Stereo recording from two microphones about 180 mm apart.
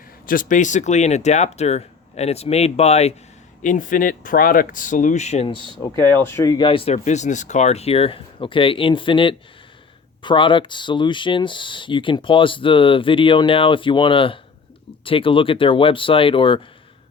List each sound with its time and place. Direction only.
0.3 s speech: 50° left (ahead or behind); by 5.7 s 25° left (ahead or behind)
6.0 s speech: 15° left (ahead or behind); by 16.6 s 30° left (ahead or behind)